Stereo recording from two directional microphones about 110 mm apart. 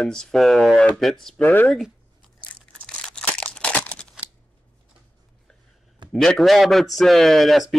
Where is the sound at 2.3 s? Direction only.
10° left (ahead or behind).